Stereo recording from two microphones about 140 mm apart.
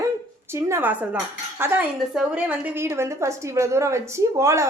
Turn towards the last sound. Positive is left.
turn(degrees=-20)  # may be behind; listen again after turning